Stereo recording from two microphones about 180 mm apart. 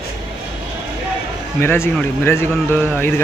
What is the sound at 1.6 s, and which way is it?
Speech, 10° left (ahead or behind).